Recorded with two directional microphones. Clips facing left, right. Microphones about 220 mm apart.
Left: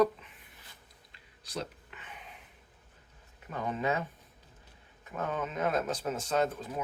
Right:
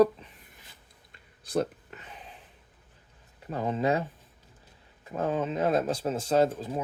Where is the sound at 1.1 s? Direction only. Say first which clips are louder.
Right 11 dB; 50° right (ahead or behind).